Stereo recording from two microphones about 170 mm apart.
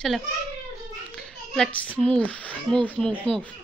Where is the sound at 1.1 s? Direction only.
5° left (ahead or behind).